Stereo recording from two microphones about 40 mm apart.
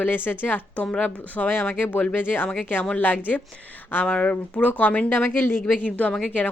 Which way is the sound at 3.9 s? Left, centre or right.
Left.